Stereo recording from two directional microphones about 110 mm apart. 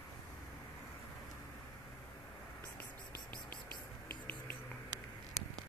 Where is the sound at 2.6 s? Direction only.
15° left (ahead or behind).